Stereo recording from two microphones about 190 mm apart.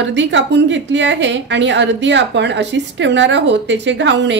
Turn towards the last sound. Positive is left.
turn(degrees=-70)  # may be behind; listen again after turning